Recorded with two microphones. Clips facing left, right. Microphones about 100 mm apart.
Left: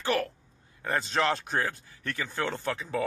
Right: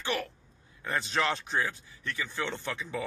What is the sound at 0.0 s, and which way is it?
Speech, 40° left (ahead or behind).